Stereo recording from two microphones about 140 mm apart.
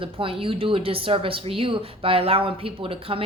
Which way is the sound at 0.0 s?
40° right (ahead or behind).